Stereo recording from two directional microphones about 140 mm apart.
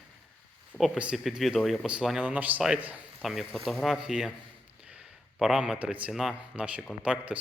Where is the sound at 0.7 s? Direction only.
Centre (ahead or behind).